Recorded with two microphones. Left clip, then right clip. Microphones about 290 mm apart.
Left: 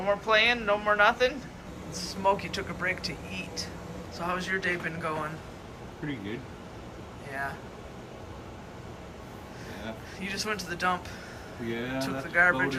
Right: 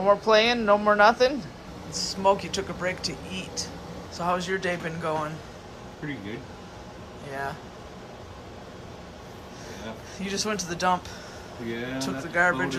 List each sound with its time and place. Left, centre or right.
0.0 s speech: centre
1.9 s speech: centre
10.2 s speech: centre